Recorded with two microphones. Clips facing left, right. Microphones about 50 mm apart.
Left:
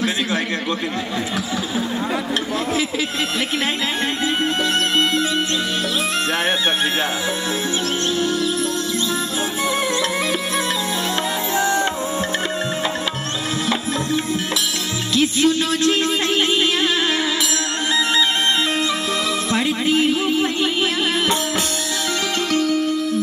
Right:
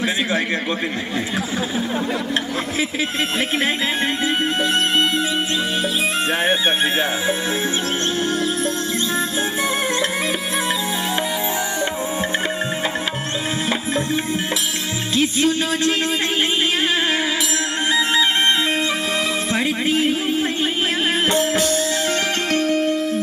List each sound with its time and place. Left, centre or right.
8.2 s music: right
15.1 s speech: right
19.5 s music: right
22.5 s music: right